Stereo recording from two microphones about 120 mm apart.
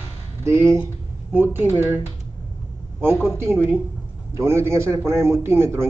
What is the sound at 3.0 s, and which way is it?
A man's voice, 20° right (ahead or behind).